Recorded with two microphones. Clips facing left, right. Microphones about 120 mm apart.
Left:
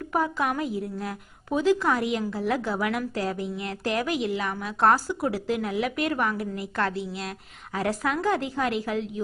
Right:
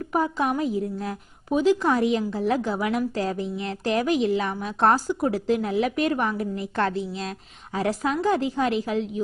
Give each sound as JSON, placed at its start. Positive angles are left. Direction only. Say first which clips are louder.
{"t": 0.1, "sound": "a woman's voice", "louder": "right 2 dB", "side_deg": -25}
{"t": 1.5, "sound": "a woman's voice", "louder": "right 2 dB", "side_deg": -15}